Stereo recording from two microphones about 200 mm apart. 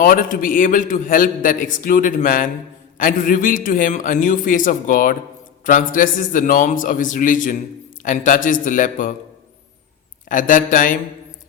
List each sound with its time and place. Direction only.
0.0 s a man's voice: 45° left (ahead or behind)
10.2 s a man's voice: 40° left (ahead or behind)